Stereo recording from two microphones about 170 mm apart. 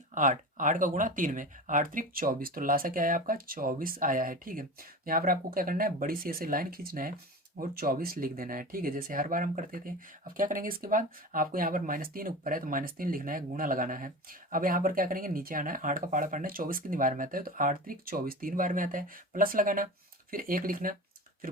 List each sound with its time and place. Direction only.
0.1 s speech: 50° right (ahead or behind)